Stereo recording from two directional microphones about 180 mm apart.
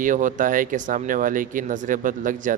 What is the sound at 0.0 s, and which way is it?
A man's voice, 45° right (ahead or behind).